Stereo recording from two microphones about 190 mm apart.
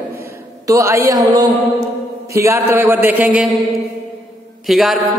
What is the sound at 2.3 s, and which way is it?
A man's voice, 15° right (ahead or behind).